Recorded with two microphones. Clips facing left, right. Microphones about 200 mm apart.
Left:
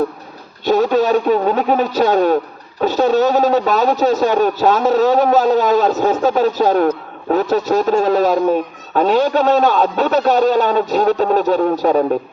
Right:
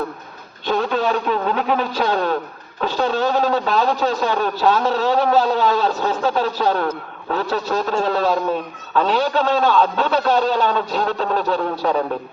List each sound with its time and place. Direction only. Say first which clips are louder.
0.6 s a man's voice: left 6 dB; 40° left (ahead or behind)